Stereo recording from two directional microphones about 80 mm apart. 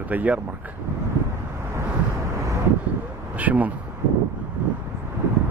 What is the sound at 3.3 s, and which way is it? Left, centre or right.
Speech, centre.